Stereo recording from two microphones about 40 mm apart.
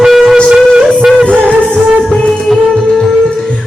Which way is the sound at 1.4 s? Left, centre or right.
Left.